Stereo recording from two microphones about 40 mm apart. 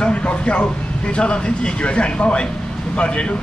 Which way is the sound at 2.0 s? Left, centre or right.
Left.